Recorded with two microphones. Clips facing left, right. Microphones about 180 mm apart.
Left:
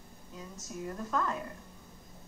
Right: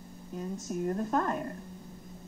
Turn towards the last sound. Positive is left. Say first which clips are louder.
# right 4 dB
turn(degrees=-50)  # may be behind; listen again after turning